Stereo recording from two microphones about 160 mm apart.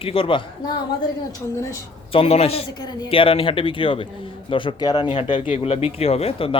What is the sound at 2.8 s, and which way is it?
Speech, 30° left (ahead or behind).